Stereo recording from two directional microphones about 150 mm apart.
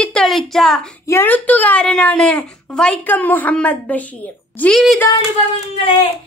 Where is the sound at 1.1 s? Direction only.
15° left (ahead or behind).